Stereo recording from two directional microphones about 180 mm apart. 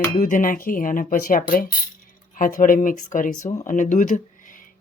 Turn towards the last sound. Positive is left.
turn(degrees=50)  # may be behind; listen again after turning